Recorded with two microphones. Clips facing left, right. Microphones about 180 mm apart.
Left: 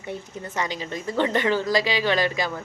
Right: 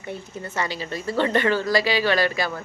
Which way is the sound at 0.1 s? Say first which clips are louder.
Even; 15° left (ahead or behind).